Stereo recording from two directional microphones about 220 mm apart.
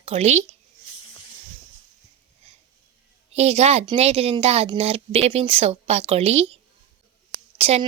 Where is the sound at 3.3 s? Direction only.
30° right (ahead or behind).